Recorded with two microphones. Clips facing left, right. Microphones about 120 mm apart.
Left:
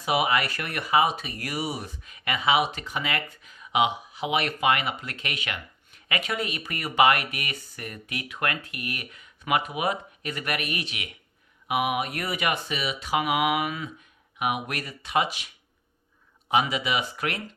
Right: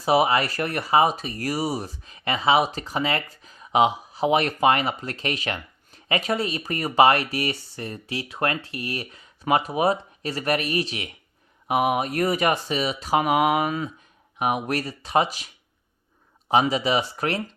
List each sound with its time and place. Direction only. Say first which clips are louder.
0.0 s speech: right 5 dB; 35° right (ahead or behind)
16.5 s speech: right 4 dB; 35° right (ahead or behind)